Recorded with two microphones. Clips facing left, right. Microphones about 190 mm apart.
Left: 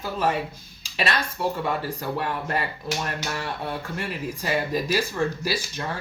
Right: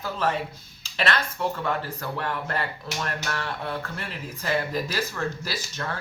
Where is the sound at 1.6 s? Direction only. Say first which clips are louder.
Left 2 dB; 10° left (ahead or behind).